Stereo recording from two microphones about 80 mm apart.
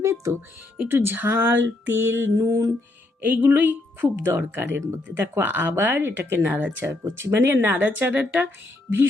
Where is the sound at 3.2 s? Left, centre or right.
Right.